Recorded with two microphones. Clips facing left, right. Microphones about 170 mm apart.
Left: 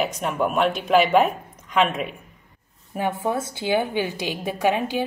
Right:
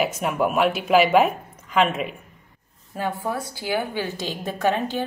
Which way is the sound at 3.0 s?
20° left (ahead or behind).